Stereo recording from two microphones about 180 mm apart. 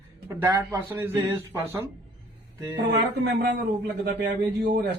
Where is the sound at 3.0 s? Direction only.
65° right (ahead or behind).